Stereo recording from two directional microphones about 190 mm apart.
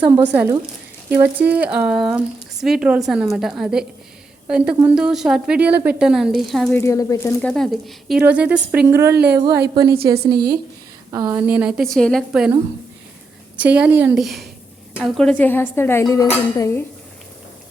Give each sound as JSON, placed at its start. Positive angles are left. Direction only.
{"t": 0.1, "sound": "a woman's voice", "side_deg": -10}
{"t": 6.7, "sound": "speech", "side_deg": 15}
{"t": 7.5, "sound": "a woman's voice", "side_deg": 0}
{"t": 9.1, "sound": "a woman's voice", "side_deg": -60}
{"t": 10.0, "sound": "a woman's voice", "side_deg": -20}
{"t": 13.6, "sound": "a woman's voice", "side_deg": -5}